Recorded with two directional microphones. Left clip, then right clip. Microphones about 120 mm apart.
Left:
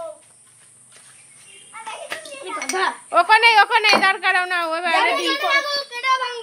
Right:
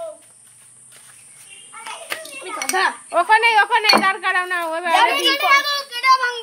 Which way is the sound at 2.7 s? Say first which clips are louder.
Right 3 dB; 40° right (ahead or behind).